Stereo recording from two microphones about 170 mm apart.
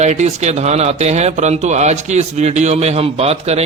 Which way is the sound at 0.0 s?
40° right (ahead or behind).